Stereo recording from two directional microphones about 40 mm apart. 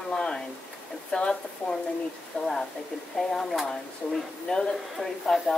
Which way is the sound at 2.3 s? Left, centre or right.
Left.